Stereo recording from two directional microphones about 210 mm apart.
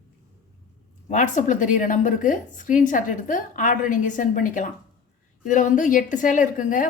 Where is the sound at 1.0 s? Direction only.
35° left (ahead or behind).